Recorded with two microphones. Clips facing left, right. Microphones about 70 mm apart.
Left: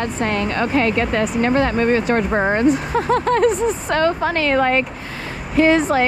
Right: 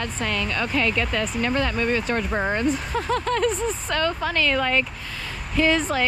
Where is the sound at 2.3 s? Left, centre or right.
Left.